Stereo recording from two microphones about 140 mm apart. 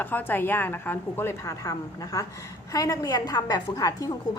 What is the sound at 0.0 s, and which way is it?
A woman's voice, 15° left (ahead or behind).